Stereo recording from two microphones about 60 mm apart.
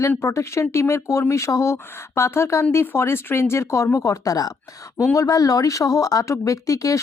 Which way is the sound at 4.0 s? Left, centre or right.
Left.